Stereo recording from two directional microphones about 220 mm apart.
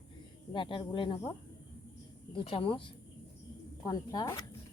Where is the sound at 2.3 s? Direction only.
25° left (ahead or behind).